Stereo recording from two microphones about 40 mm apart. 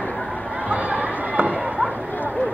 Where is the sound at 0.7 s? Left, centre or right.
Right.